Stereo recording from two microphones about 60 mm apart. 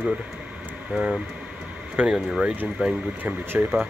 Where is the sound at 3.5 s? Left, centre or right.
Right.